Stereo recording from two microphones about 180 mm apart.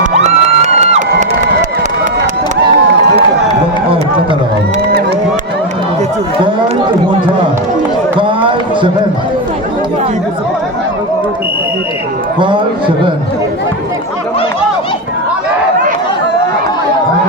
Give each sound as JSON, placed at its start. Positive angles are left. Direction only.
{"t": 0.0, "sound": "music", "side_deg": -40}
{"t": 8.2, "sound": "run", "side_deg": -30}